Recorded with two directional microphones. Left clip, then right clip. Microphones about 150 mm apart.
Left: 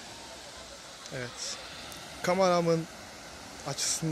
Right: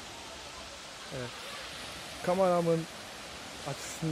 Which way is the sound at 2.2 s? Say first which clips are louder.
Left 2 dB; 15° left (ahead or behind).